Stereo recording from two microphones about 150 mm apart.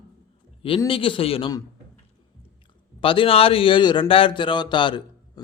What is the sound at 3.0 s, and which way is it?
A man's voice, 35° left (ahead or behind).